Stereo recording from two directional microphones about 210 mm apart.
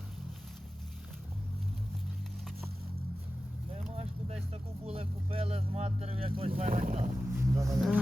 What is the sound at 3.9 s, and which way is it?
Vehicle, 30° right (ahead or behind).